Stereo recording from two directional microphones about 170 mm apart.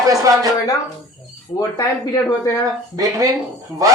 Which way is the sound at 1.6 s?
20° left (ahead or behind).